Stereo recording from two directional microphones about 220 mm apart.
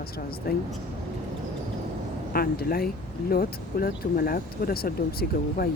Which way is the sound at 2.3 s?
45° left (ahead or behind).